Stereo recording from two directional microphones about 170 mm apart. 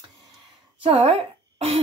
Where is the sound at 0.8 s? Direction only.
35° right (ahead or behind).